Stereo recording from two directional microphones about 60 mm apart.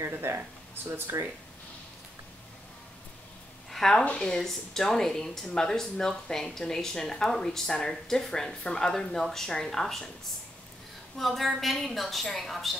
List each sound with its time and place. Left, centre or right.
0.0 s speech: right
1.1 s speech: right
3.7 s a woman's voice: centre
11.1 s a woman's voice: centre